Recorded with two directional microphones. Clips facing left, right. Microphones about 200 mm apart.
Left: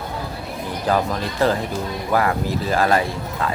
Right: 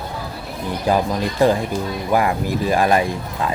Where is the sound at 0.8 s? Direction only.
15° right (ahead or behind).